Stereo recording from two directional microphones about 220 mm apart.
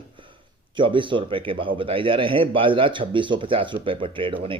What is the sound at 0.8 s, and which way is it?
Speech, 20° right (ahead or behind).